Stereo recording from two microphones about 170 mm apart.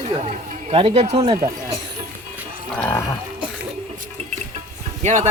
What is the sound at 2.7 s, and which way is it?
Livestock, 15° left (ahead or behind).